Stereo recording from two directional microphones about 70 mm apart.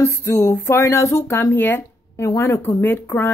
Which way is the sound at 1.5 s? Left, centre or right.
Left.